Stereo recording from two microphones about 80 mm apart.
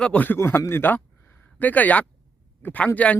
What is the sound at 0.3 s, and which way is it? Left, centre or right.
Speech, left.